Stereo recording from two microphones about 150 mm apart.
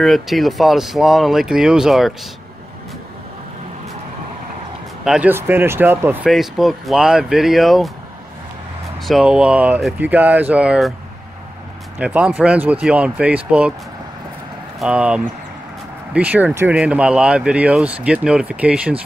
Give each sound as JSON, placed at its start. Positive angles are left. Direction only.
{"t": 0.0, "sound": "speech", "side_deg": 0}
{"t": 5.0, "sound": "speech", "side_deg": -5}
{"t": 6.2, "sound": "speech", "side_deg": 0}
{"t": 9.0, "sound": "speech", "side_deg": -5}
{"t": 12.0, "sound": "speech", "side_deg": -10}
{"t": 14.8, "sound": "speech", "side_deg": -5}